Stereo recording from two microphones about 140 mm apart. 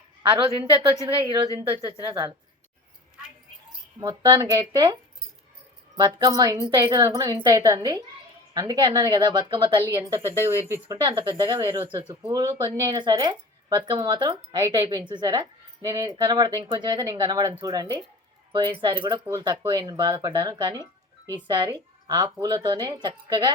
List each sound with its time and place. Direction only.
0.3 s speech: 40° right (ahead or behind)
4.0 s speech: 30° right (ahead or behind)
6.0 s speech: 25° right (ahead or behind)
10.2 s speech: 20° right (ahead or behind)
11.3 s speech: 35° right (ahead or behind)